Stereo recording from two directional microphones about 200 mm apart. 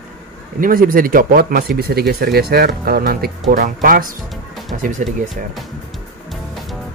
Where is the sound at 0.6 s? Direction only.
45° right (ahead or behind).